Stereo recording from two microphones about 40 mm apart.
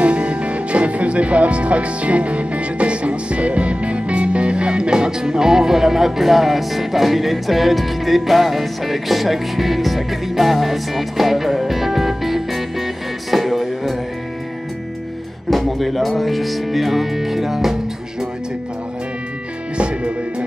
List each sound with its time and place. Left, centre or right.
0.0 s speech: right; by 13.9 s centre
15.5 s speech: centre
19.8 s music: right